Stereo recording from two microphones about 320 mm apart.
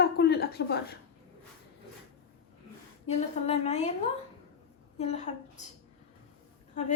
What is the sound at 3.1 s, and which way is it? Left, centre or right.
A woman's voice, centre.